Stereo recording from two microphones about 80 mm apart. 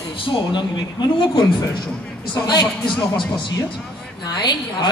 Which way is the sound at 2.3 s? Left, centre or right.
Left.